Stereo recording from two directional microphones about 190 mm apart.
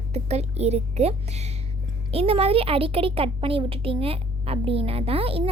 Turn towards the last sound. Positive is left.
turn(degrees=-30)  # may be behind; listen again after turning